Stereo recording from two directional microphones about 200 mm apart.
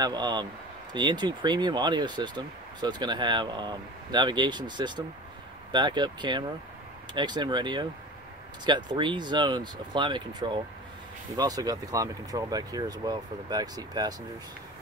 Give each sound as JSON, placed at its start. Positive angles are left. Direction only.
{"t": 0.0, "sound": "speech", "side_deg": -20}